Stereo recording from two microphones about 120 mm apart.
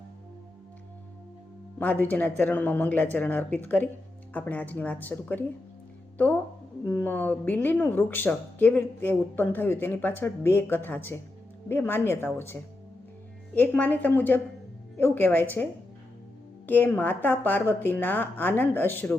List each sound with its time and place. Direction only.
1.8 s a woman's voice: 15° left (ahead or behind)
13.6 s speech: 15° left (ahead or behind)
16.6 s speech: 15° left (ahead or behind)